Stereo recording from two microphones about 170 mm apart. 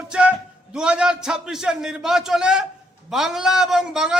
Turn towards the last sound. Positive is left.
turn(degrees=-5)  # may be behind; listen again after turning